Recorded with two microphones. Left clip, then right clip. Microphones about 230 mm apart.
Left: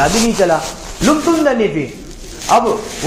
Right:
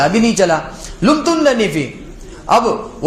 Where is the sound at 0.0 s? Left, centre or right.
Right.